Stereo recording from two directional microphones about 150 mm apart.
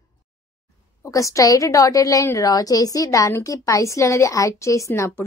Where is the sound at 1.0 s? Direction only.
20° left (ahead or behind).